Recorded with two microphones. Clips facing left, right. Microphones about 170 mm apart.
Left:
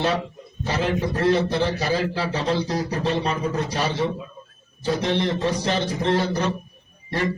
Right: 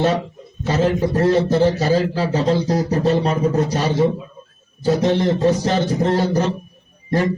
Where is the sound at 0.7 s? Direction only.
40° right (ahead or behind).